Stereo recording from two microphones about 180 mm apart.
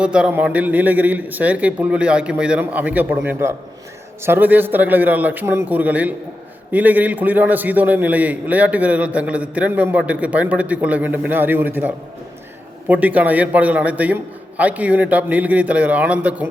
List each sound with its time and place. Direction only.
0.0 s a man's voice: 5° right (ahead or behind)